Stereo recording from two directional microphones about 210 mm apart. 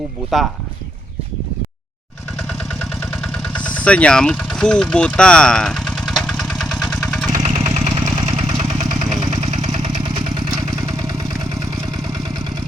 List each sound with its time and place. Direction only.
2.5 s vehicle: centre (ahead or behind)
7.3 s vehicle: 35° right (ahead or behind); by 11.3 s 20° right (ahead or behind)